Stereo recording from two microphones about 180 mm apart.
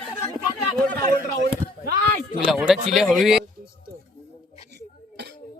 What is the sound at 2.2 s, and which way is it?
A man's voice, centre (ahead or behind).